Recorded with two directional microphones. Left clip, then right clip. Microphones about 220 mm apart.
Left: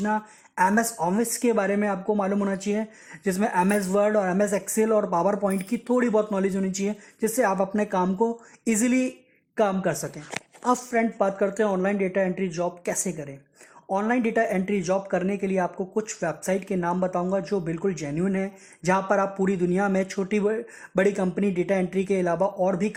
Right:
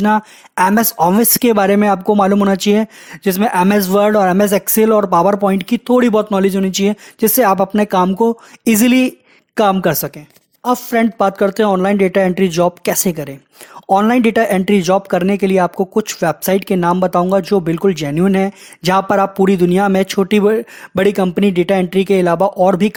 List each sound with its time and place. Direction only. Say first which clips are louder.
0.0 s speech: right 12 dB; 50° right (ahead or behind)
1.8 s speech: right 13 dB; 40° right (ahead or behind)
5.9 s speech: right 10 dB; 40° right (ahead or behind)
6.7 s speech: right 13 dB; 60° right (ahead or behind)
7.2 s speech: right 11 dB; 40° right (ahead or behind)
8.9 s speech: right 11 dB; 55° right (ahead or behind)
13.0 s speech: right 12 dB; 55° right (ahead or behind)
14.9 s speech: right 11 dB; 60° right (ahead or behind)
15.4 s speech: right 12 dB; 45° right (ahead or behind)
16.6 s speech: right 12 dB; 60° right (ahead or behind)
16.8 s speech: right 12 dB; 40° right (ahead or behind)
22.0 s speech: right 11 dB; 40° right (ahead or behind)